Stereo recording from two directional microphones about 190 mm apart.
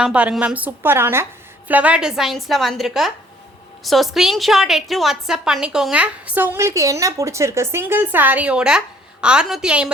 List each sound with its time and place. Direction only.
0.0 s a woman's voice: 5° right (ahead or behind)